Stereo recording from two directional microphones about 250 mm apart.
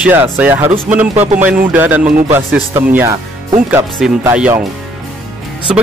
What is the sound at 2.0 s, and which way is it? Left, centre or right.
Speech, right.